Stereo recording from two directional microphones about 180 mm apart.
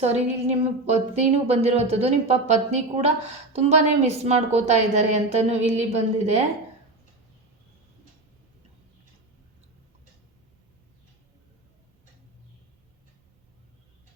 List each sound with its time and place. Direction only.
0.0 s a woman's voice: 35° right (ahead or behind)